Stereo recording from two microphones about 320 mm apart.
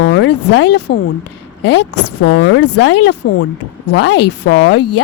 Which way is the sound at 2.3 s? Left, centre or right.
Left.